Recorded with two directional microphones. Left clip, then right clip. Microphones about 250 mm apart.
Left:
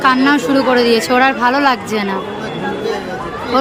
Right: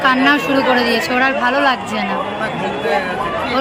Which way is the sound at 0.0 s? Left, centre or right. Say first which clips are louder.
Left 1 dB; centre.